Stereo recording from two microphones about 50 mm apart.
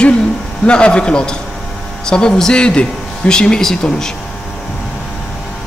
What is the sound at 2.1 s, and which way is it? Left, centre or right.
Speech, centre.